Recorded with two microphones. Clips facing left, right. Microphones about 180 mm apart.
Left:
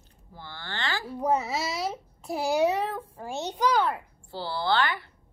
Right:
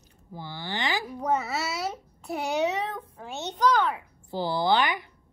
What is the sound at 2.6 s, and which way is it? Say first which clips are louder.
A child's voice: left 3 dB; 10° left (ahead or behind).